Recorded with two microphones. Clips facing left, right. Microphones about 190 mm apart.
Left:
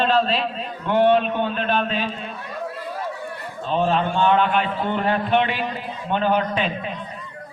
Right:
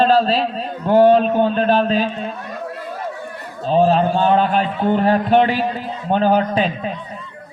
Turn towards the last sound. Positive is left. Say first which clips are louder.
# right 5 dB
turn(degrees=-40)  # may be behind; listen again after turning